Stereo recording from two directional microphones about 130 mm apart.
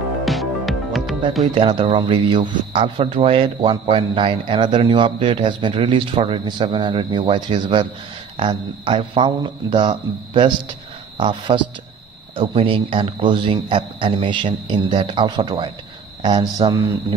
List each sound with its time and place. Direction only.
0.2 s music: centre (ahead or behind)
1.5 s speech: 40° right (ahead or behind)